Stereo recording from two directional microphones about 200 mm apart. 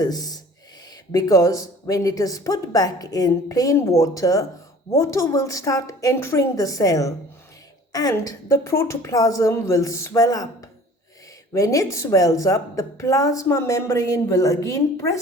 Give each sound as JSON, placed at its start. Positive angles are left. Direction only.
{"t": 0.0, "sound": "a woman's voice", "side_deg": 20}